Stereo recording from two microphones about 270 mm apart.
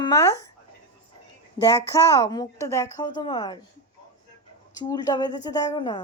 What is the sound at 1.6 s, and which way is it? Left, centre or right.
Speech, centre.